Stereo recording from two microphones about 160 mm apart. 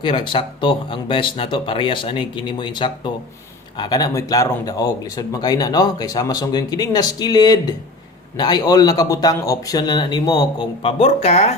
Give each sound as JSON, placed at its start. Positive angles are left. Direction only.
{"t": 0.0, "sound": "speech", "side_deg": 30}